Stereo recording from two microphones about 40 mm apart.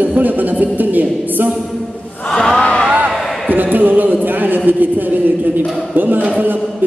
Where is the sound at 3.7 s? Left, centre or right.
Right.